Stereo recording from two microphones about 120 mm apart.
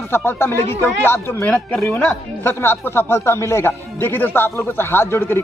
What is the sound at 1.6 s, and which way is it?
Speech, 5° left (ahead or behind).